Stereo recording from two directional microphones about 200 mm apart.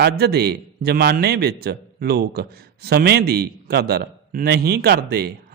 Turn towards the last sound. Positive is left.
turn(degrees=-50)  # may be behind; listen again after turning